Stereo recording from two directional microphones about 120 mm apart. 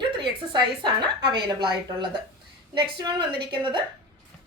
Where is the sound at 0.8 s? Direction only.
40° right (ahead or behind).